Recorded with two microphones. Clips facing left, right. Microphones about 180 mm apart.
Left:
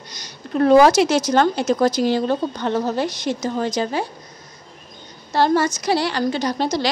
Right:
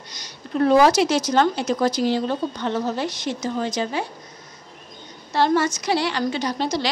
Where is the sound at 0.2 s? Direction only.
50° left (ahead or behind).